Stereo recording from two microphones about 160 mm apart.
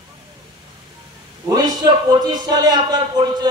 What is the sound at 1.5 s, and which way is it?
Speech, 25° right (ahead or behind).